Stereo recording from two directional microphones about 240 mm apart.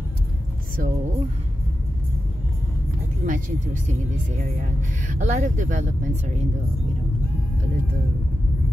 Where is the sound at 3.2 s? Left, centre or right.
Right.